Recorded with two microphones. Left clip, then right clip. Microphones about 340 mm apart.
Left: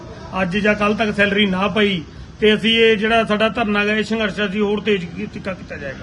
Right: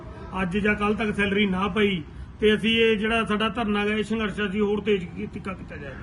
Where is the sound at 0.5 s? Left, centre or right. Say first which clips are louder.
Left 6 dB; centre.